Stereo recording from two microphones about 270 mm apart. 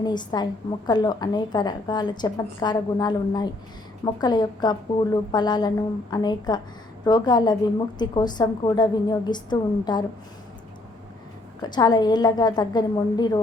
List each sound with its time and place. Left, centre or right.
0.0 s a woman's voice: centre
11.6 s a woman's voice: centre